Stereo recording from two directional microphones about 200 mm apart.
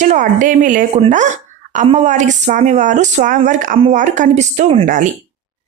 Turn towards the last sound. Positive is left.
turn(degrees=-35)  # may be behind; listen again after turning